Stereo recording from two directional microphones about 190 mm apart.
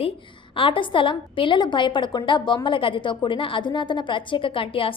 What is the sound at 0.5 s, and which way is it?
A woman's voice, 25° left (ahead or behind).